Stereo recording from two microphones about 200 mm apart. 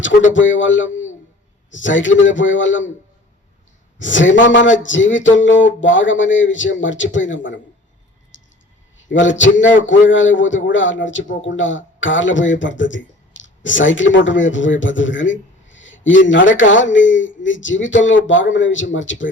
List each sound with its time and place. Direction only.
0.3 s a man's voice: 70° left (ahead or behind)
3.9 s a man's voice: 70° left (ahead or behind)
8.3 s a sound: 70° left (ahead or behind)
9.0 s a man's voice: 70° left (ahead or behind)